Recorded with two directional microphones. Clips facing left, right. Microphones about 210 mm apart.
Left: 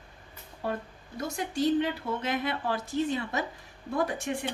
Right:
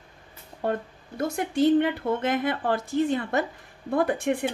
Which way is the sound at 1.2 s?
55° right (ahead or behind).